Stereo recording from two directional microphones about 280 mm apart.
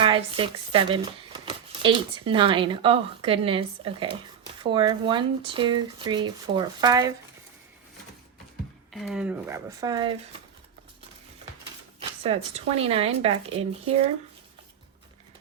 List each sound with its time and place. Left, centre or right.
0.0 s speech: centre
8.9 s speech: centre
11.9 s speech: right